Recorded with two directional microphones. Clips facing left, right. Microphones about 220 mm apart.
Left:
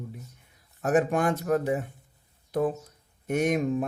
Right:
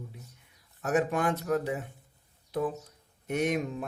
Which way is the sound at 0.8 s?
50° left (ahead or behind).